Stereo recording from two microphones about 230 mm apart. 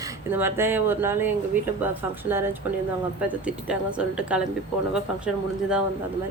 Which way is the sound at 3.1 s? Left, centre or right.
Centre.